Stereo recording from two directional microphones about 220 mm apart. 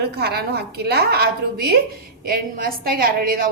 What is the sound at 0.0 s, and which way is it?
A woman's voice, 45° right (ahead or behind).